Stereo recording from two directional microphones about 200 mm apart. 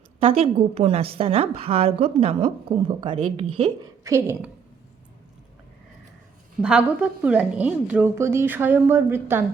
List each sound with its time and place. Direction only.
0.2 s a woman's voice: 30° right (ahead or behind)
4.0 s a woman's voice: 15° right (ahead or behind)
6.6 s a woman's voice: 5° right (ahead or behind)